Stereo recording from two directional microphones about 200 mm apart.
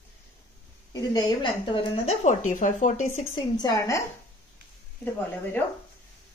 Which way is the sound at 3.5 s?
15° left (ahead or behind).